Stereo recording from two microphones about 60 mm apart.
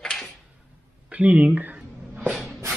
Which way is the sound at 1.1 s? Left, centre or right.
Right.